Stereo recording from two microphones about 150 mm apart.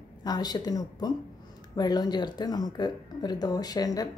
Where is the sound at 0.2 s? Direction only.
25° left (ahead or behind).